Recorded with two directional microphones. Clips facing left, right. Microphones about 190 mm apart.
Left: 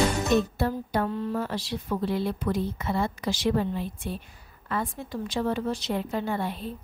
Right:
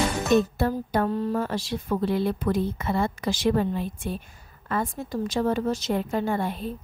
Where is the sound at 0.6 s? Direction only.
45° right (ahead or behind).